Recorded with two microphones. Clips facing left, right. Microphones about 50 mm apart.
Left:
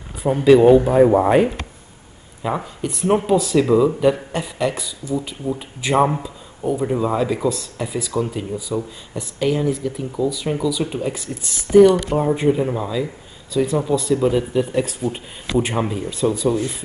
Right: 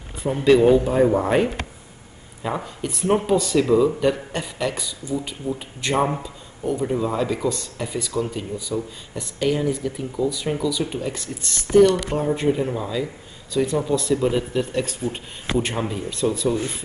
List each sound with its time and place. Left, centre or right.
0.2 s speech: left